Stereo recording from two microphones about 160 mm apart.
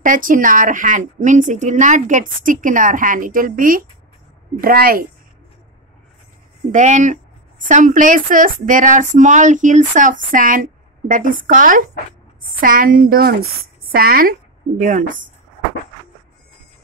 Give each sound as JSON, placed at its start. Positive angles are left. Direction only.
{"t": 0.0, "sound": "a woman's voice", "side_deg": -55}
{"t": 6.7, "sound": "a woman's voice", "side_deg": -50}
{"t": 14.8, "sound": "speech", "side_deg": -55}